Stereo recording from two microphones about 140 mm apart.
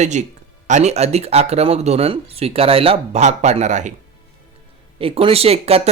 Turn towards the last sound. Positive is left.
turn(degrees=-45)  # may be behind; listen again after turning